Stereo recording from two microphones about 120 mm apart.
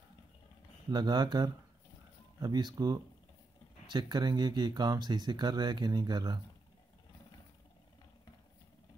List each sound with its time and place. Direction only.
0.8 s speech: 35° right (ahead or behind)